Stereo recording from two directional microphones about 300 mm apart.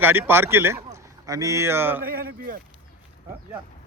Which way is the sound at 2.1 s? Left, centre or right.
Right.